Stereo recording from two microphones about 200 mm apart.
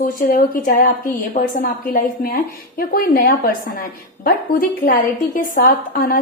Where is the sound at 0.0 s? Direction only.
45° left (ahead or behind).